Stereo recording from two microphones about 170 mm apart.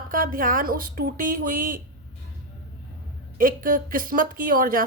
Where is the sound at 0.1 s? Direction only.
55° right (ahead or behind).